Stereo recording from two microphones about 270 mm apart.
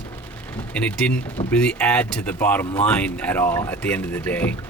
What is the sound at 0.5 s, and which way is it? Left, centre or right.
Speech, centre.